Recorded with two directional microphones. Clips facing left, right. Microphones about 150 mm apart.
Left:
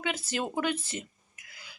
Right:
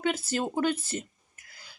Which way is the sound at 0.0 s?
40° right (ahead or behind).